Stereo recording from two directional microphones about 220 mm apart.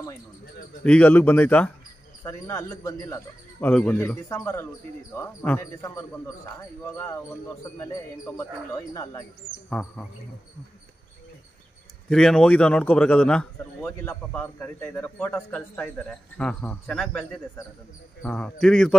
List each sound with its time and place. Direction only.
0.8 s a man's voice: 5° left (ahead or behind)
7.8 s a man's voice: 10° left (ahead or behind)
9.7 s a man's voice: 5° left (ahead or behind)
12.1 s a man's voice: centre (ahead or behind)